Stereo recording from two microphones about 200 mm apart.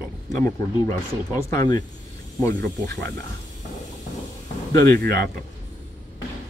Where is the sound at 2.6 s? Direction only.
55° right (ahead or behind).